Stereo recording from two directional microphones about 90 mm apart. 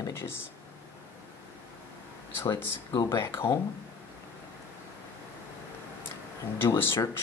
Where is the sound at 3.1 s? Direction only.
30° left (ahead or behind).